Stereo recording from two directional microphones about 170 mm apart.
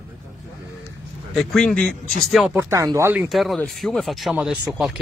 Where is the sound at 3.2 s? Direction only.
Centre (ahead or behind).